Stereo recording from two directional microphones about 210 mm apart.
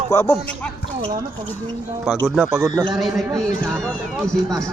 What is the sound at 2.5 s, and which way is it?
Speech, 15° right (ahead or behind).